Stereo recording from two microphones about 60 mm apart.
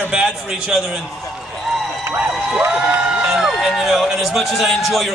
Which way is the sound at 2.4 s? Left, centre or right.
Right.